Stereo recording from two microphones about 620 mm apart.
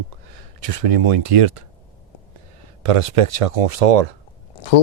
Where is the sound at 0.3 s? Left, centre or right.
Right.